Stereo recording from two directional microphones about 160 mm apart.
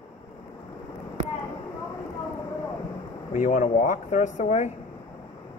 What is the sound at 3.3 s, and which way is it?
Speech, 50° left (ahead or behind).